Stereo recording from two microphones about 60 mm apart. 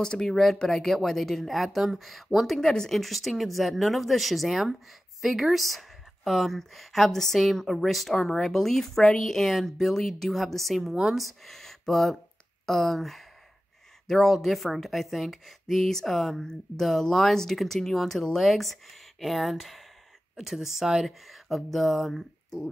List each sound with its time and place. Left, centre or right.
0.0 s speech: centre
11.4 s speech: centre